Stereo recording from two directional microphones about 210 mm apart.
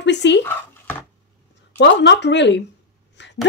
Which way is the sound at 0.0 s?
55° left (ahead or behind).